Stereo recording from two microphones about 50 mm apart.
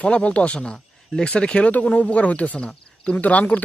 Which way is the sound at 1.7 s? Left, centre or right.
Left.